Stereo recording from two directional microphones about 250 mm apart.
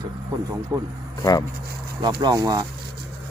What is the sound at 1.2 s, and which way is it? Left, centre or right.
Speech, centre.